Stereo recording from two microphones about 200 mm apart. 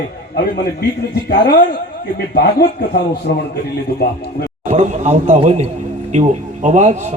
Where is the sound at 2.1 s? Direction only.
55° left (ahead or behind).